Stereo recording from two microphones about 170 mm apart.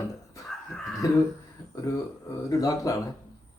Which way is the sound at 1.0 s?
20° left (ahead or behind).